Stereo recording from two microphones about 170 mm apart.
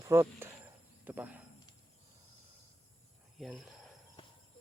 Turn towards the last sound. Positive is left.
turn(degrees=0)  # may be behind; listen again after turning